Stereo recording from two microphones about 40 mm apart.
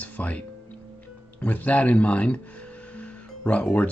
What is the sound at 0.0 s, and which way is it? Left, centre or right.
Music, left.